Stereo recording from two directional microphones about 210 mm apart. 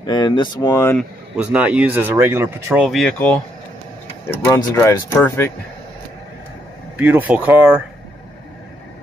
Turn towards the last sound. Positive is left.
turn(degrees=-10)  # may be behind; listen again after turning